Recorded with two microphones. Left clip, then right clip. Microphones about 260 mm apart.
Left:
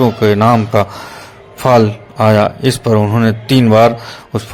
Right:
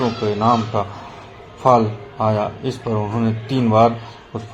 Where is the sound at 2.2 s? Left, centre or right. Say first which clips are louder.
Left 9 dB; left.